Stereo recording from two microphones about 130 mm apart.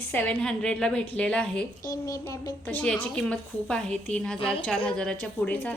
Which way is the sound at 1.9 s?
25° left (ahead or behind).